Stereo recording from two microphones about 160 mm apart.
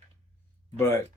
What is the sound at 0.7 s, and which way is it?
Speech, 15° left (ahead or behind).